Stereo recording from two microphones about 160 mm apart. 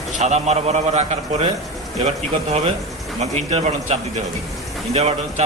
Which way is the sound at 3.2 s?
45° right (ahead or behind).